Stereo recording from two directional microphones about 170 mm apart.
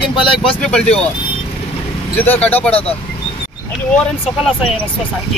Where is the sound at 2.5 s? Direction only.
10° left (ahead or behind).